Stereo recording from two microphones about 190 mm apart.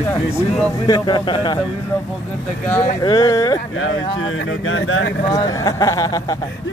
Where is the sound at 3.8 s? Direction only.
85° left.